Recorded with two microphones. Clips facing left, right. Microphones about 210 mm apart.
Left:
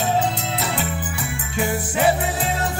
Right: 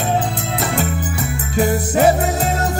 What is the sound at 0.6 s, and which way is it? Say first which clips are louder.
Music: right 4 dB; 45° right (ahead or behind).